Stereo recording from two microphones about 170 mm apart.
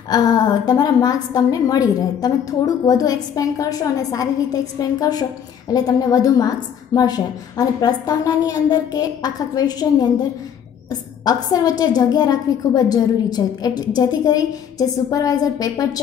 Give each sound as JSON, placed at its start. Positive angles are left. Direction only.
{"t": 0.1, "sound": "a woman's voice", "side_deg": 25}
{"t": 11.4, "sound": "a woman's voice", "side_deg": 20}